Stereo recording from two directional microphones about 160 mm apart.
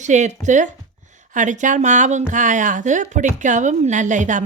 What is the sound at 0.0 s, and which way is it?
Speech, 45° right (ahead or behind).